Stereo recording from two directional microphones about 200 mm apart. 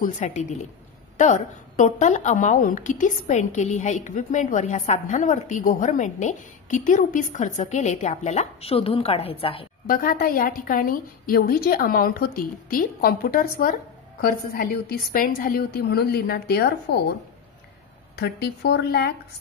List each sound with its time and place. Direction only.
0.0 s a woman's voice: 40° left (ahead or behind)
9.8 s a woman's voice: 45° left (ahead or behind)
18.1 s speech: 55° left (ahead or behind)